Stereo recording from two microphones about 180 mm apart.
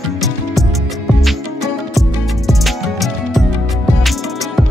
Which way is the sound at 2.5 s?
Centre (ahead or behind).